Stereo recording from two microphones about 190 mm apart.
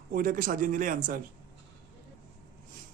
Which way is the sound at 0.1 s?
45° right (ahead or behind).